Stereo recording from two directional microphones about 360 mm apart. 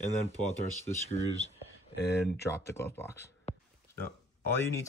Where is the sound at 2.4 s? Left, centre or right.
Centre.